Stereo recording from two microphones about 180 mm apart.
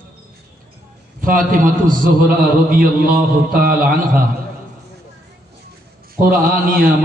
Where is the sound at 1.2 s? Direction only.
50° right (ahead or behind).